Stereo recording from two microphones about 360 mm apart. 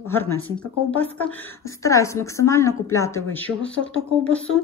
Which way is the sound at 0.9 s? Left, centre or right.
Centre.